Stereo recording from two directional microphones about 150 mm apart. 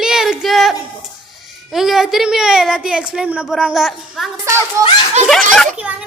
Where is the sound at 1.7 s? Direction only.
Centre (ahead or behind).